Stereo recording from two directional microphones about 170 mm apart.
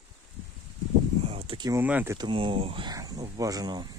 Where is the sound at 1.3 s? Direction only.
35° right (ahead or behind).